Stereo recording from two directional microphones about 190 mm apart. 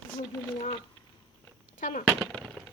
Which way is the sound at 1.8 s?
45° left (ahead or behind).